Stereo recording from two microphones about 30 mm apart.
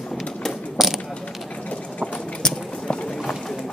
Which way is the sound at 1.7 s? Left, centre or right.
Left.